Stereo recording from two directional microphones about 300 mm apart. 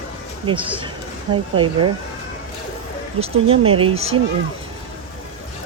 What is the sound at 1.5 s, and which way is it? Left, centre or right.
Speech, centre.